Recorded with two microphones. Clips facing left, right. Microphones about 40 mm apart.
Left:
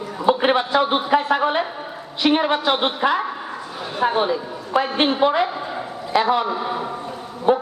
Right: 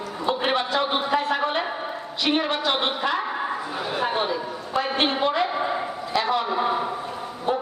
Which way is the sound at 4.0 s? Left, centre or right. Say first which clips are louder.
Left 6 dB; centre.